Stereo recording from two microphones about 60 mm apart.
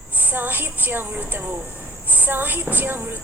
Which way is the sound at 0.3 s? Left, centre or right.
Right.